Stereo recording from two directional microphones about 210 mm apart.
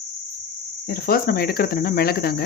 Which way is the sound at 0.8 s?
45° left (ahead or behind).